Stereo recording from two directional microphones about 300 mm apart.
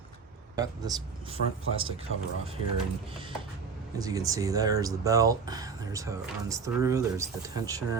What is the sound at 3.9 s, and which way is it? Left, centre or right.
Speech, centre.